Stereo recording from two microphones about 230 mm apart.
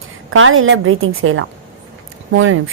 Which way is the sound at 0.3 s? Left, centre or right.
Right.